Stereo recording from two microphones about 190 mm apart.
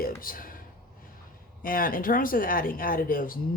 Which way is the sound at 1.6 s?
50° left (ahead or behind).